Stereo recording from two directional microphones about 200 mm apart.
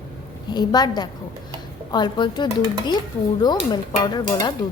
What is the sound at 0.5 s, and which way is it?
Speech, 20° left (ahead or behind).